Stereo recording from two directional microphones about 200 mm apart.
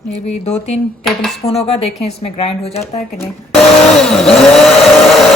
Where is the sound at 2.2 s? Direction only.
30° left (ahead or behind).